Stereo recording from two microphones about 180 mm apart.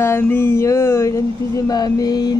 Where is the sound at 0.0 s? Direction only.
15° left (ahead or behind).